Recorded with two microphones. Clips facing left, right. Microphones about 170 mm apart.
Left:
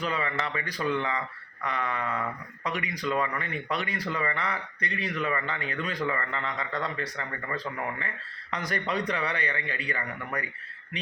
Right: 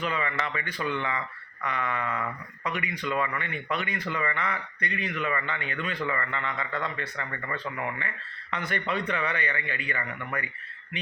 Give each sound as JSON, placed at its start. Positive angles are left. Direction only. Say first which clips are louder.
{"t": 0.0, "sound": "speech", "louder": "even", "side_deg": 35}